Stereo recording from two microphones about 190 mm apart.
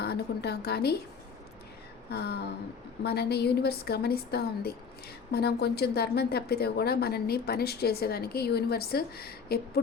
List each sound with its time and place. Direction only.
0.0 s a woman's voice: 55° left (ahead or behind)
2.1 s a woman's voice: 60° left (ahead or behind)